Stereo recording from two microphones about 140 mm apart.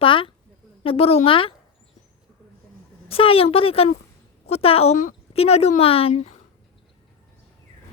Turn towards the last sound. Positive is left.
turn(degrees=45)  # may be behind; listen again after turning